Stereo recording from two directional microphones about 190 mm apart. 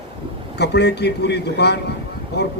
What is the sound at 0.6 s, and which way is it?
A man's voice, 60° left (ahead or behind).